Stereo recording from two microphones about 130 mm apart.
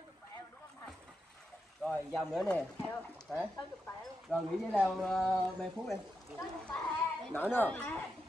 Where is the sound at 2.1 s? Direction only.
5° left (ahead or behind).